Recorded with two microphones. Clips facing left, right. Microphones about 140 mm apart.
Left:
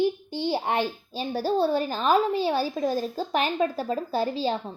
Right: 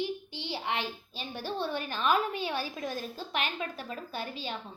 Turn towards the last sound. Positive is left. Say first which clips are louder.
# left 12 dB
turn(degrees=35)  # may be behind; listen again after turning